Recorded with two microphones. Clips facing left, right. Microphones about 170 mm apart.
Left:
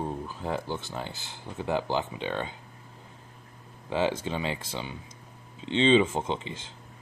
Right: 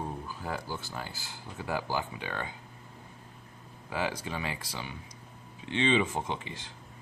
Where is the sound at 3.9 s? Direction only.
25° left (ahead or behind).